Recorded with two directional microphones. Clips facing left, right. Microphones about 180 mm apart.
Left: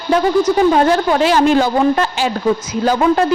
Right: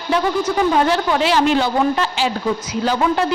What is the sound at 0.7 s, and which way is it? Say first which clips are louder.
A woman's voice: left 4 dB; 45° left (ahead or behind).